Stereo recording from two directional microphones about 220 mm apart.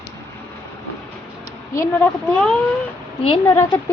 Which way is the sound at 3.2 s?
25° left (ahead or behind).